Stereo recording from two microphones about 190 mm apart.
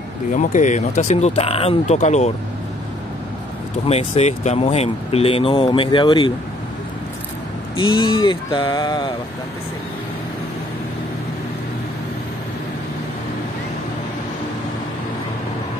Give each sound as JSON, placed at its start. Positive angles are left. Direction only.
{"t": 0.3, "sound": "speech", "side_deg": 40}
{"t": 3.8, "sound": "speech", "side_deg": 30}
{"t": 7.7, "sound": "speech", "side_deg": 25}